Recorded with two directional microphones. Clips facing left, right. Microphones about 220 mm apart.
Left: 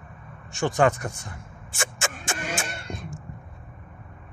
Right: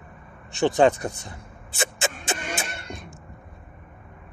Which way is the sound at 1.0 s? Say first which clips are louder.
Right 3 dB; 35° right (ahead or behind).